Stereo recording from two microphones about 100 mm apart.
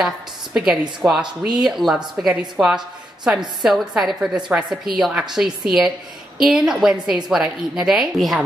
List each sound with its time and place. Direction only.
0.0 s a woman's voice: 5° right (ahead or behind)
1.0 s speech: 20° right (ahead or behind)
1.4 s a woman's voice: 5° right (ahead or behind)